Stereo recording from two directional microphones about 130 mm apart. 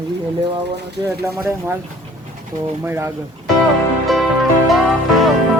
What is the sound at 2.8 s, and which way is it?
Speech, 20° right (ahead or behind).